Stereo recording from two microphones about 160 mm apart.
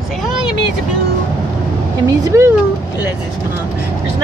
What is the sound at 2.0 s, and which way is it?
Speech, 20° right (ahead or behind).